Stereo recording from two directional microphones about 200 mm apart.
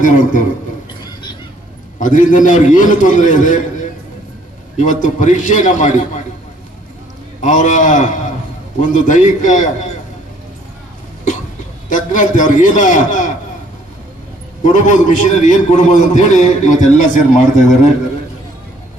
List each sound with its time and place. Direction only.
0.0 s a man's voice: 40° left (ahead or behind)
2.0 s a man's voice: 40° left (ahead or behind)
4.8 s a man's voice: 40° left (ahead or behind)
7.4 s a man's voice: 40° left (ahead or behind)
11.9 s a man's voice: 40° left (ahead or behind)
14.6 s a man's voice: 40° left (ahead or behind)